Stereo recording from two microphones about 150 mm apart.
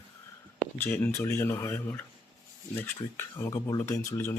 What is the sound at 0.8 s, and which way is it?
Speech, 15° left (ahead or behind).